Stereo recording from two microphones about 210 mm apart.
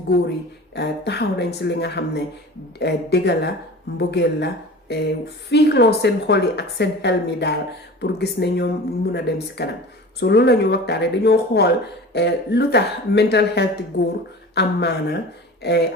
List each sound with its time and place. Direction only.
0.1 s a woman's voice: 55° left (ahead or behind)